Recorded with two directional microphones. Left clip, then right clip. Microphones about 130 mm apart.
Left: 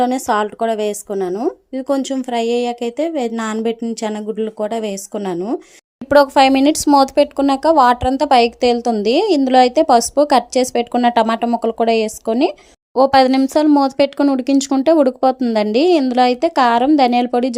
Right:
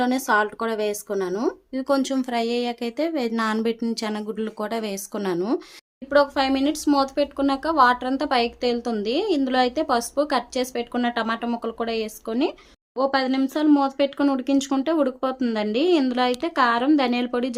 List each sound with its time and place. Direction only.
0.1 s speech: 35° left (ahead or behind)
1.0 s speech: 20° left (ahead or behind)
3.6 s speech: 15° left (ahead or behind)
6.1 s a woman's voice: 80° left; by 11.4 s 55° left (ahead or behind)
11.4 s a woman's voice: 40° left (ahead or behind)
13.0 s a woman's voice: 75° left (ahead or behind)
13.4 s a woman's voice: 55° left (ahead or behind); by 17.5 s 40° left (ahead or behind)